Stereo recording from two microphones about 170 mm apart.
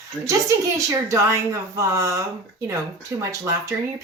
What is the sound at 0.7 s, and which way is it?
Speech, 20° right (ahead or behind).